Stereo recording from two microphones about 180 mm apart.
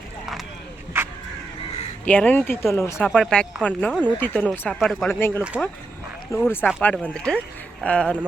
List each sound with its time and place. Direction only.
0.9 s a sound: 15° right (ahead or behind)
2.0 s speech: 10° left (ahead or behind)
3.1 s speech: 5° left (ahead or behind)
5.0 s speech: 15° left (ahead or behind)
5.4 s speech: 5° right (ahead or behind)
6.3 s speech: 15° left (ahead or behind)